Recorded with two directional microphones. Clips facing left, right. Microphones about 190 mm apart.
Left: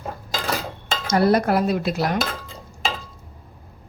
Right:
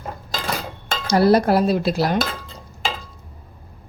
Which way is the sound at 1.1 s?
35° right (ahead or behind).